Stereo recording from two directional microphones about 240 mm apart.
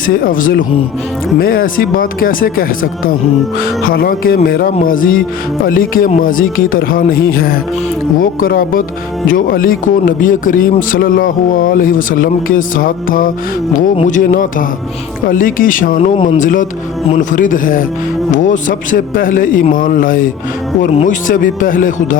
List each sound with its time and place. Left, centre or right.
0.0 s speech: left